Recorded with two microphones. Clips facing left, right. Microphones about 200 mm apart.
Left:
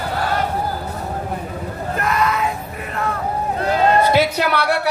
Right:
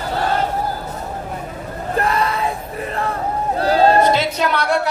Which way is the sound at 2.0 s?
30° right (ahead or behind).